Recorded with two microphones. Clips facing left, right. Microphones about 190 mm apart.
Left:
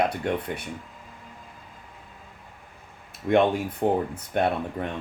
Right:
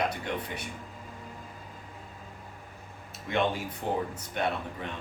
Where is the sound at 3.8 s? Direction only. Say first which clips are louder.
Left 7 dB; 50° left (ahead or behind).